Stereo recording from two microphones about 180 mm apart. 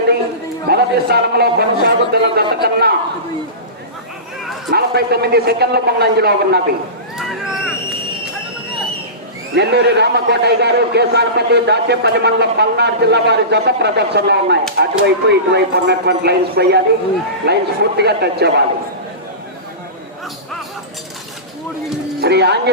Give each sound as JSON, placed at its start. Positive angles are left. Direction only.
{"t": 0.7, "sound": "a man's voice", "side_deg": -60}
{"t": 4.7, "sound": "a man's voice", "side_deg": -60}
{"t": 7.2, "sound": "a sound", "side_deg": -5}
{"t": 9.6, "sound": "a man's voice", "side_deg": -70}
{"t": 22.2, "sound": "a man's voice", "side_deg": -70}